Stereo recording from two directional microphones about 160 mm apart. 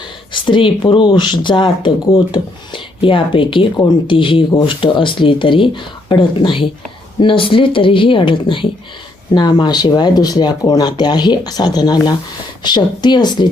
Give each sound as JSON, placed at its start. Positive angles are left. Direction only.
{"t": 0.4, "sound": "speech", "side_deg": 30}